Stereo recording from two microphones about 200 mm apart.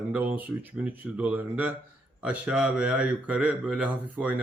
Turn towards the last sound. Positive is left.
turn(degrees=-10)  # may be behind; listen again after turning